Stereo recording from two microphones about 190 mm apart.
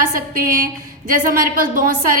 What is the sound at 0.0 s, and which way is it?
A woman's voice, 50° right (ahead or behind).